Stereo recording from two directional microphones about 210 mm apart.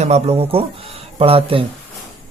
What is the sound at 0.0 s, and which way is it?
Speech, 30° right (ahead or behind).